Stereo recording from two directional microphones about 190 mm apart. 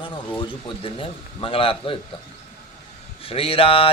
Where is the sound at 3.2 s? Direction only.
30° left (ahead or behind).